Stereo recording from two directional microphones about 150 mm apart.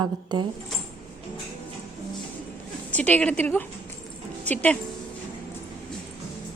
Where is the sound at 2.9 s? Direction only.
10° left (ahead or behind).